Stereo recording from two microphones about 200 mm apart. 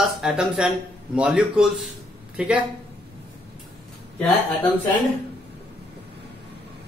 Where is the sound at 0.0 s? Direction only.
Centre (ahead or behind).